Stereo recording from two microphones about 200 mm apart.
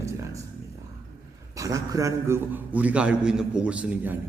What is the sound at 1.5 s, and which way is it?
A man's voice, 15° right (ahead or behind).